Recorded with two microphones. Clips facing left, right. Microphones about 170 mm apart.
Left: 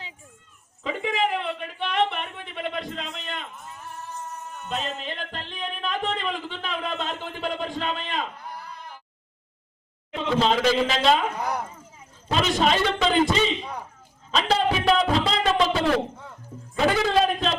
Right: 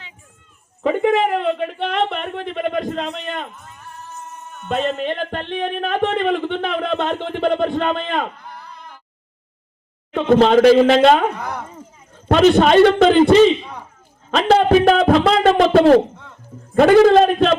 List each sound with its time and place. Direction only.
0.8 s a sound: 55° right (ahead or behind)
5.0 s speech: 55° right (ahead or behind)
10.2 s a man's voice: 55° right (ahead or behind)
14.3 s a man's voice: 55° right (ahead or behind)